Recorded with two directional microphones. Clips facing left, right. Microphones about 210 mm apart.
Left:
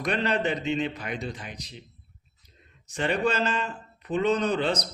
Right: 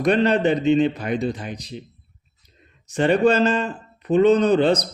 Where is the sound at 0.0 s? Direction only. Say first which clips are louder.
Right 9 dB; 35° right (ahead or behind).